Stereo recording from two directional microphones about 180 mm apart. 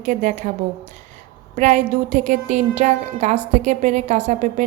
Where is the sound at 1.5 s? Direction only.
40° right (ahead or behind).